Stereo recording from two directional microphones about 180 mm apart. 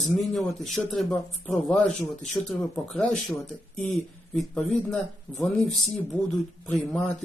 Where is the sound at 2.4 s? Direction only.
15° left (ahead or behind).